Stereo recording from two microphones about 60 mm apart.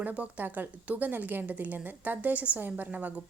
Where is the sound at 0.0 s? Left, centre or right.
Right.